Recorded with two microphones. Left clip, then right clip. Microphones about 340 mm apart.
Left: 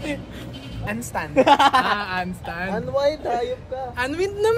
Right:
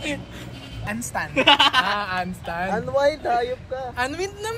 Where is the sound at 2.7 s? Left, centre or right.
Right.